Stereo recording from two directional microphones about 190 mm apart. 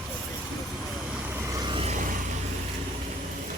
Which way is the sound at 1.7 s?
30° right (ahead or behind).